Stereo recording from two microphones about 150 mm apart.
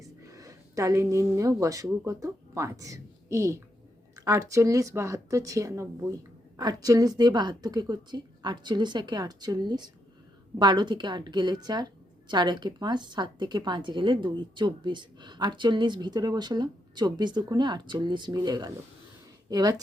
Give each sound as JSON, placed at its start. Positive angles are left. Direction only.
{"t": 0.0, "sound": "a woman's voice", "side_deg": -20}